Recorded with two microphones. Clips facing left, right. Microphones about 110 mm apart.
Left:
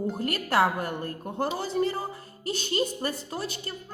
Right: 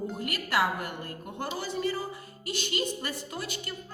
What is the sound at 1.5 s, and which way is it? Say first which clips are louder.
A man's voice: even; 25° left (ahead or behind).